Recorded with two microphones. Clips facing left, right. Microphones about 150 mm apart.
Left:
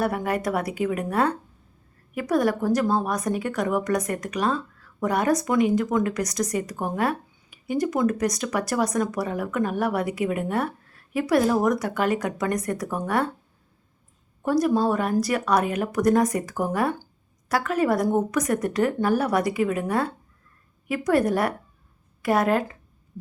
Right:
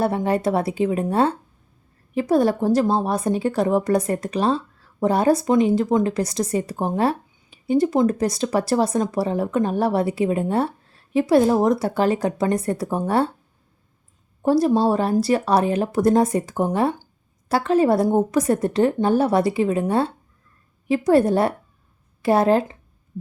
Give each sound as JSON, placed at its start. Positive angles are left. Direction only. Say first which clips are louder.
{"t": 0.0, "sound": "a woman's voice", "louder": "right 4 dB", "side_deg": -25}
{"t": 14.4, "sound": "a woman's voice", "louder": "right 4 dB", "side_deg": -30}